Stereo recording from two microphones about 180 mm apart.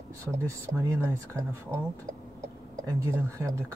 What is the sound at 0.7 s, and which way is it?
Speech, 15° right (ahead or behind).